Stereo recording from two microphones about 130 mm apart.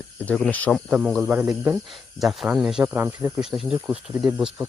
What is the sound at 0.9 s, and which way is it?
Speech, 5° right (ahead or behind).